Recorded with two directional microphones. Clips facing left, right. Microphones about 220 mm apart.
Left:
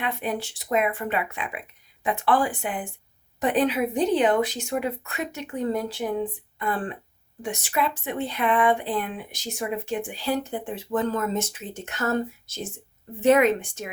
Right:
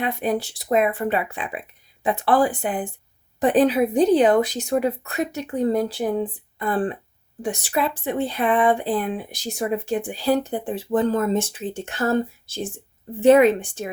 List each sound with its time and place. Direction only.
0.0 s speech: 35° right (ahead or behind)